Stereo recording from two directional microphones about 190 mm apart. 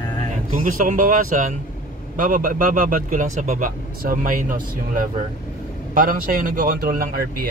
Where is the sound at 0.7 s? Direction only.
45° right (ahead or behind).